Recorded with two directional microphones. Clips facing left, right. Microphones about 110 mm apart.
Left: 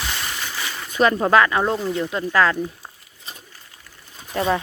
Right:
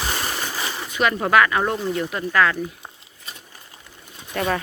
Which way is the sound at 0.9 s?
35° left (ahead or behind).